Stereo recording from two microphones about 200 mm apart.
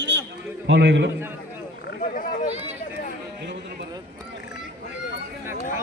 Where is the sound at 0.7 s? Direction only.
65° right (ahead or behind).